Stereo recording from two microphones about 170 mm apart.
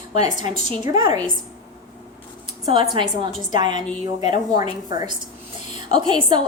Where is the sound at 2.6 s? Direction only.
30° right (ahead or behind).